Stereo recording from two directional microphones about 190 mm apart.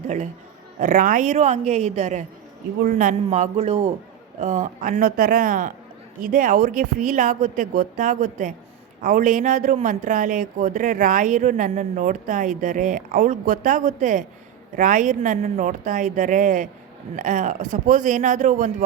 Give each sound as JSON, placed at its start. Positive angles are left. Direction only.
{"t": 0.8, "sound": "a man's voice", "side_deg": -45}